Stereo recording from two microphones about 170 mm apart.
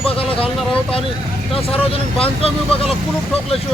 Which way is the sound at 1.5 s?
35° left (ahead or behind).